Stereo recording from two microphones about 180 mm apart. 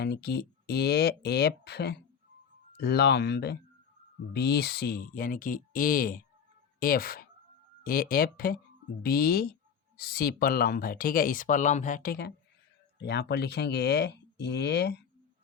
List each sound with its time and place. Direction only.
0.0 s speech: 60° left (ahead or behind); by 12.1 s 45° left (ahead or behind)
13.0 s speech: 70° left (ahead or behind)